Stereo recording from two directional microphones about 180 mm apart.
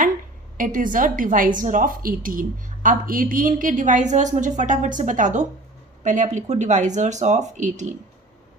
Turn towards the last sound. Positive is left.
turn(degrees=-45)  # may be behind; listen again after turning